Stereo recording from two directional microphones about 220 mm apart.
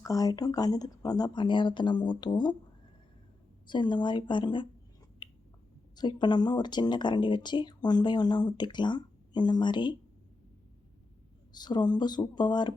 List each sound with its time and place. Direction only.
0.0 s speech: 15° left (ahead or behind)
3.7 s speech: 20° left (ahead or behind)
5.2 s a sound: 20° left (ahead or behind)
6.0 s speech: 20° left (ahead or behind)
11.5 s speech: 20° left (ahead or behind)